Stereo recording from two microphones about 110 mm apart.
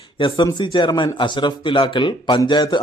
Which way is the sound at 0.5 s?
45° left (ahead or behind).